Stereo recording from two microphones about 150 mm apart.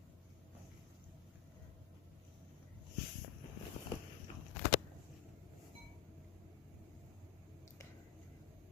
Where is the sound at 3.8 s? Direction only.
65° left (ahead or behind).